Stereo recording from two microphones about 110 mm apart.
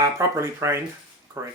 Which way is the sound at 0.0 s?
25° right (ahead or behind).